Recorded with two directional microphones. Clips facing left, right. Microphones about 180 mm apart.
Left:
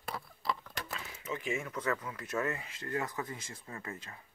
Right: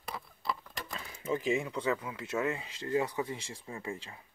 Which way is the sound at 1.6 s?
15° right (ahead or behind).